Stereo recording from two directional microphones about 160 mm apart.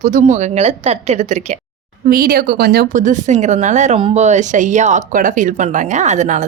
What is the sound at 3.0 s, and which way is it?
A woman's voice, 50° right (ahead or behind).